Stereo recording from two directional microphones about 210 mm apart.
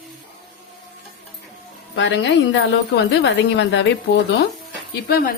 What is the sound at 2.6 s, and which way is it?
A woman's voice, 60° left (ahead or behind).